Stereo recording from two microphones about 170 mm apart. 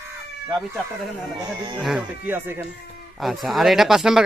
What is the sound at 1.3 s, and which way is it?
Speech, 25° right (ahead or behind).